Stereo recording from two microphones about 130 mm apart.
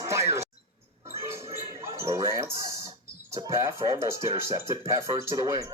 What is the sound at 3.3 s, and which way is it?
Music, 25° right (ahead or behind).